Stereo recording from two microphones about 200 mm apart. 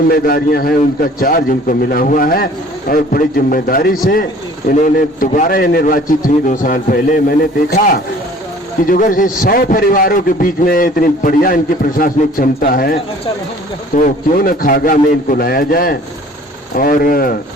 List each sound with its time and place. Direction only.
0.1 s a man's voice: 50° left (ahead or behind)
8.9 s a man's voice: 40° left (ahead or behind)